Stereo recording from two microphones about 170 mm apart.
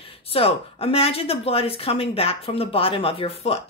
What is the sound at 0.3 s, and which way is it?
Speech, 35° left (ahead or behind).